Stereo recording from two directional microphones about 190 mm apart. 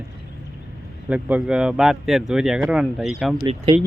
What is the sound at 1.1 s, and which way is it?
Speech, 5° right (ahead or behind).